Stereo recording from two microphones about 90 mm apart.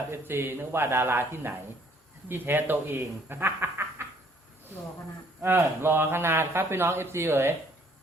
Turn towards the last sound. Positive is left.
turn(degrees=-25)  # may be behind; listen again after turning